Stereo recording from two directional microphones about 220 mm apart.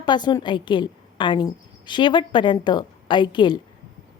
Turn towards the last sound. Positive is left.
turn(degrees=20)  # may be behind; listen again after turning